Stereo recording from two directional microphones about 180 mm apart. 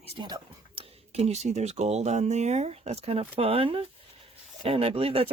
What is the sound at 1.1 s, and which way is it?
Speech, 35° right (ahead or behind).